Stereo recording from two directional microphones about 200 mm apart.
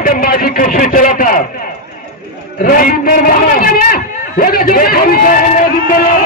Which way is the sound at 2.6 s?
45° left (ahead or behind).